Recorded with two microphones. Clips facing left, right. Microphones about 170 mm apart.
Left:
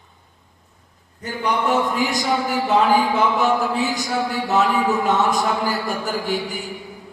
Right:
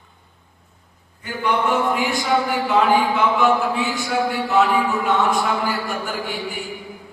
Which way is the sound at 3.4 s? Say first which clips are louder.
Right 1 dB; 40° left (ahead or behind).